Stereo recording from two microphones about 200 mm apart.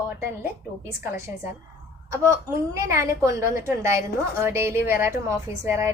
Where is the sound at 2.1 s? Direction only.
15° right (ahead or behind).